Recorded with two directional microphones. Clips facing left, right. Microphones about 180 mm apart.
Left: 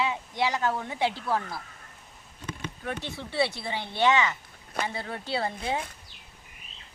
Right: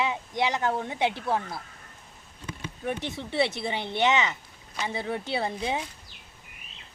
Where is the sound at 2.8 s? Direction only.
20° right (ahead or behind).